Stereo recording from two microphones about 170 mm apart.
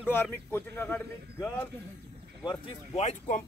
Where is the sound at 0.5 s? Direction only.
10° left (ahead or behind).